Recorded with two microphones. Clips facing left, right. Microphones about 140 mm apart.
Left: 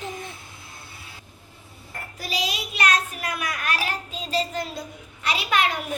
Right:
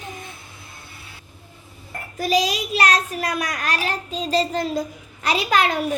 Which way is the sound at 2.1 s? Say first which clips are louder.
Right 9 dB; 45° right (ahead or behind).